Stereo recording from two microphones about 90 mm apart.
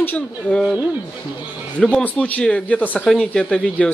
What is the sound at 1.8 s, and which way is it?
Speech, 10° left (ahead or behind).